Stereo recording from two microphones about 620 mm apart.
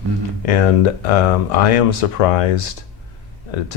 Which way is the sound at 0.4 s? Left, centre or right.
Left.